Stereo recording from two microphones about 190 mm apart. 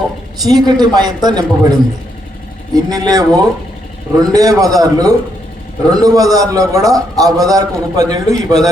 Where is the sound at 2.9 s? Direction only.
20° right (ahead or behind).